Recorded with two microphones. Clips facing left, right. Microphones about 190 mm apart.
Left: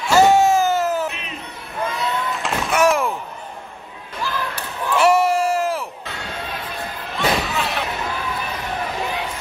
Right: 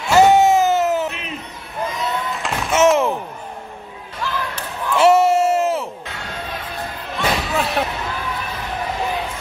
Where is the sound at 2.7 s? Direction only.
25° right (ahead or behind).